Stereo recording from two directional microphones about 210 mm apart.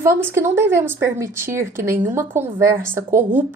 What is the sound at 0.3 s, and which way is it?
A woman's voice, 10° right (ahead or behind).